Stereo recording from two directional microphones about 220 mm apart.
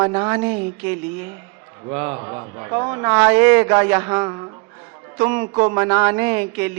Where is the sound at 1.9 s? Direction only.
20° right (ahead or behind).